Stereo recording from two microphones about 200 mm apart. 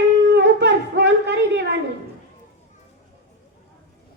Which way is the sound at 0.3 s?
60° right (ahead or behind).